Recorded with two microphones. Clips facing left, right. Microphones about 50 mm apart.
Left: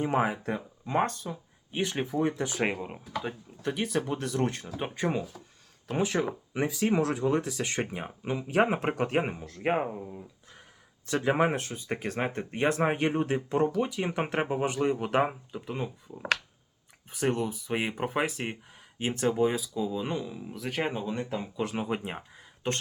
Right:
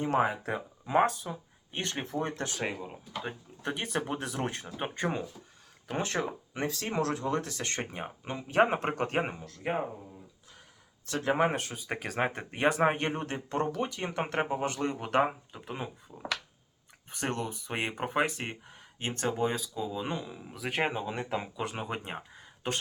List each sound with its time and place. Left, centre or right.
0.0 s speech: centre
0.5 s speech: centre
3.2 s speech: centre
9.6 s speech: left
11.2 s speech: centre
13.1 s speech: centre
15.6 s speech: centre
20.7 s speech: right
21.5 s speech: centre